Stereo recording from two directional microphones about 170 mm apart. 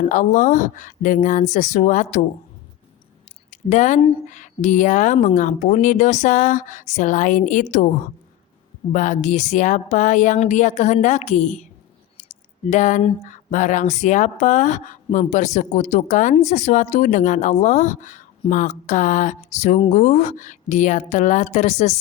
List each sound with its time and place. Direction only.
0.1 s speech: 50° left (ahead or behind)
3.5 s speech: 45° left (ahead or behind)
8.9 s speech: 45° left (ahead or behind)
12.6 s speech: 45° left (ahead or behind)